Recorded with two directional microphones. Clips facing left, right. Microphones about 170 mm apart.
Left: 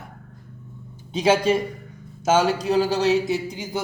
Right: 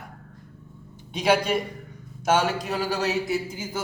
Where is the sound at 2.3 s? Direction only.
20° left (ahead or behind).